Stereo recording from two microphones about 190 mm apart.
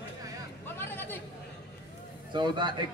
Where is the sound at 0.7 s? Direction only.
10° left (ahead or behind).